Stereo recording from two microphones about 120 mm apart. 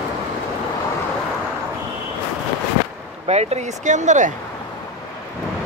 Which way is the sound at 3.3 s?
65° right (ahead or behind).